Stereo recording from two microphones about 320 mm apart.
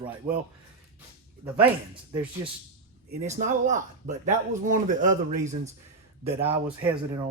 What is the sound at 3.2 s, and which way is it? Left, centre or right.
Speech, right.